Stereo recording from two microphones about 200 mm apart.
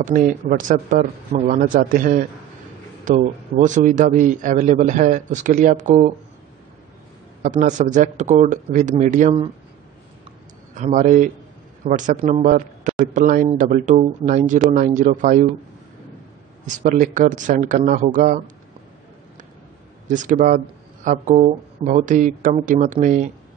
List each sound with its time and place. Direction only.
0.0 s a man's voice: 40° right (ahead or behind)
7.4 s speech: 40° right (ahead or behind)
10.7 s speech: 40° right (ahead or behind)
16.6 s speech: 40° right (ahead or behind)
20.1 s speech: 40° right (ahead or behind)